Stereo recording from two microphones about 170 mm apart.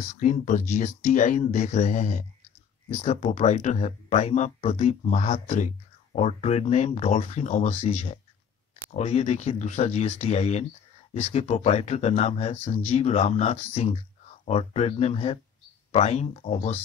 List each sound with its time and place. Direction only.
0.1 s speech: 45° left (ahead or behind)